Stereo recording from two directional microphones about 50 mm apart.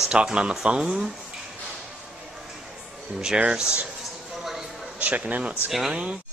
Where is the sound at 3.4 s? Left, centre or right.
Centre.